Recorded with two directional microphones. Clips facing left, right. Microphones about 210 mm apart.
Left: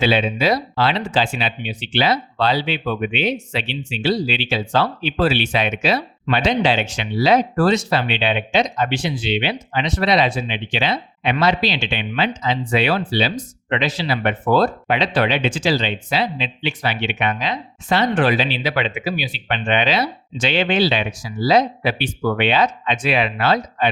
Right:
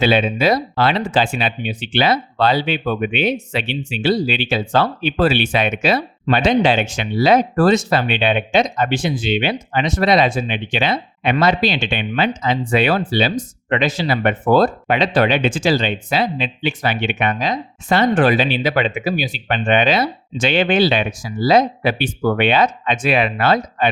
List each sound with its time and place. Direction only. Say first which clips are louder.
0.0 s speech: right 2 dB; 50° right (ahead or behind)